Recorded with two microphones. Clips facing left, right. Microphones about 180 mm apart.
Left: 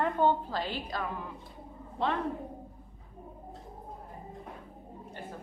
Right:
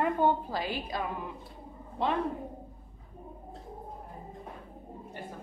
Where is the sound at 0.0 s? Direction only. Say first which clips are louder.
Even; 10° right (ahead or behind).